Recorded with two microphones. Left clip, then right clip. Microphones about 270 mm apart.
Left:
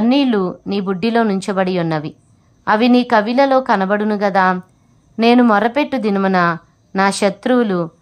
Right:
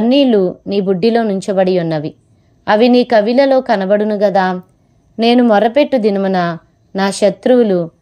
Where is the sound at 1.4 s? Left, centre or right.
Centre.